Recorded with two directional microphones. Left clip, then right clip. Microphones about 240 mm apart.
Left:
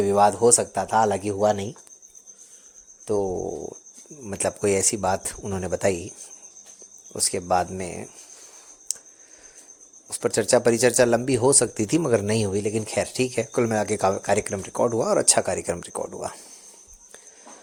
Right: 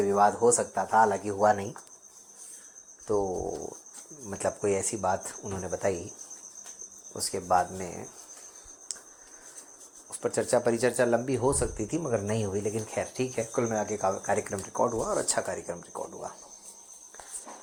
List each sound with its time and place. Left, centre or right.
0.0 s speech: left
3.1 s speech: left
7.1 s speech: left
10.1 s speech: left